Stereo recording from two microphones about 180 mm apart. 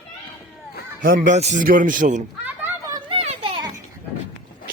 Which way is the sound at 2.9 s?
30° right (ahead or behind).